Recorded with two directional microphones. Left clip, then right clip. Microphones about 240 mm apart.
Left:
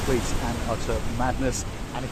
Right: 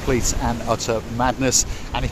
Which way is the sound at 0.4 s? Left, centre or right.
Right.